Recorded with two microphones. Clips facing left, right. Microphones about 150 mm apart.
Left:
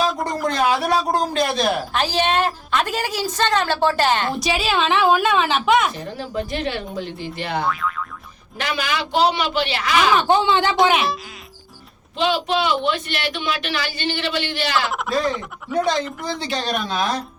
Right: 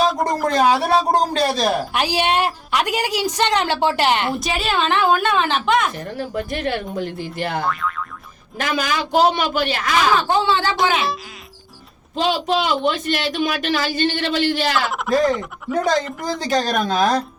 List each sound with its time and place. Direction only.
0.4 s speech: 40° right (ahead or behind)
1.9 s a woman's voice: 15° right (ahead or behind)
4.4 s a woman's voice: centre (ahead or behind)
6.1 s a woman's voice: 50° right (ahead or behind)
7.6 s a woman's voice: centre (ahead or behind)
8.5 s a woman's voice: 45° right (ahead or behind)
10.2 s speech: 20° left (ahead or behind)
12.1 s a woman's voice: 40° right (ahead or behind)
14.8 s a woman's voice: centre (ahead or behind)
16.2 s a woman's voice: 45° right (ahead or behind)